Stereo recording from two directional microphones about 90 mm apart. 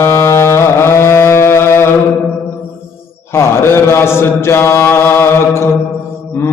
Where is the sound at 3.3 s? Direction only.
25° left (ahead or behind).